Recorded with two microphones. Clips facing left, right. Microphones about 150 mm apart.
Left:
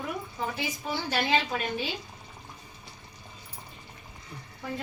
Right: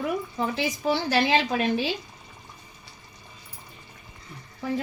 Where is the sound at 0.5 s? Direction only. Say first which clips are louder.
Right 7 dB; 85° right.